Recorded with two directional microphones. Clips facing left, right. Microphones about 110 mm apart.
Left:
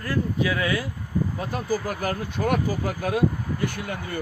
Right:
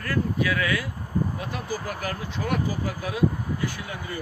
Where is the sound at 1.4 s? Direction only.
40° left (ahead or behind).